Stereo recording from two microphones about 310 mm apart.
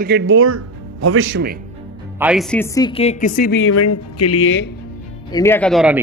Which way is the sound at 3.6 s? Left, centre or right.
Left.